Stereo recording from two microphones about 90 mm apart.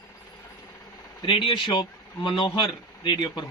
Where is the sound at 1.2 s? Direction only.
65° left (ahead or behind).